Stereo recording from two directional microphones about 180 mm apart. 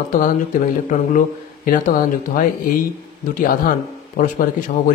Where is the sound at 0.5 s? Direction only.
45° left (ahead or behind).